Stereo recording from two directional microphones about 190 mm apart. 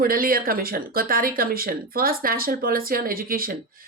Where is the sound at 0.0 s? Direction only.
50° right (ahead or behind).